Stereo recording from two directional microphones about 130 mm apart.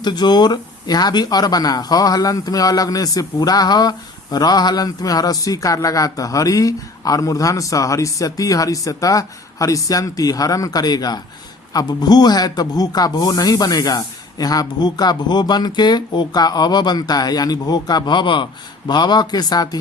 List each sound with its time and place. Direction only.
0.0 s speech: 35° left (ahead or behind)